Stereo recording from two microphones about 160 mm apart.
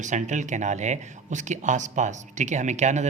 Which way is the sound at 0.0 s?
50° right (ahead or behind).